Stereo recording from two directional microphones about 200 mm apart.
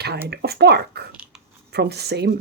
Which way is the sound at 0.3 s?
55° right (ahead or behind).